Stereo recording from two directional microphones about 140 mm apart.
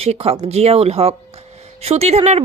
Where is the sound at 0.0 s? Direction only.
45° right (ahead or behind).